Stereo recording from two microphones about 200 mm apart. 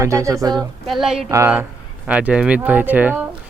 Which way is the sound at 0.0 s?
15° right (ahead or behind).